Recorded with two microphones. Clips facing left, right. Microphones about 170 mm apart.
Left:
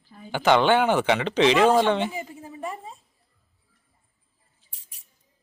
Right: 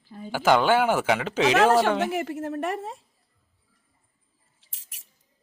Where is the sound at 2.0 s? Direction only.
85° right.